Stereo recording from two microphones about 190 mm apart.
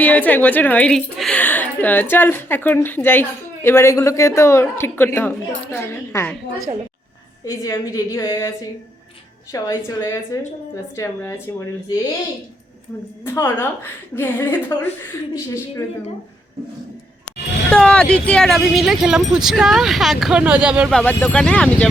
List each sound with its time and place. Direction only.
0.0 s a woman's voice: 10° left (ahead or behind)
7.4 s a woman's voice: 15° left (ahead or behind)
13.2 s a woman's voice: 15° left (ahead or behind)
17.7 s speech: 5° left (ahead or behind)
20.9 s a woman's voice: 10° left (ahead or behind)